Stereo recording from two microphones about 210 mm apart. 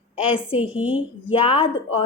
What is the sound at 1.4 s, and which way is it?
Speech, 25° left (ahead or behind).